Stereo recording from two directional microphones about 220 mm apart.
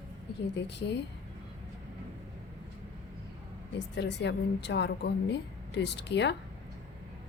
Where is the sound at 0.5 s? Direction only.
50° left (ahead or behind).